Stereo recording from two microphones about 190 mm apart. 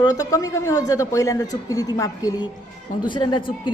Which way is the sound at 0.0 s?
20° left (ahead or behind).